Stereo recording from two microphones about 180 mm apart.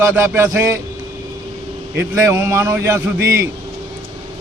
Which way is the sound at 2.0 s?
10° right (ahead or behind).